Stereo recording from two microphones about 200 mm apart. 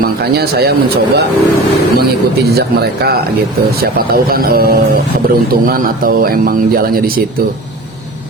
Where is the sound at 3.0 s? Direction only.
55° right (ahead or behind).